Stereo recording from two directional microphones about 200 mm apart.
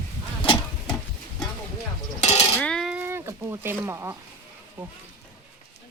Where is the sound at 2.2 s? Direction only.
30° left (ahead or behind).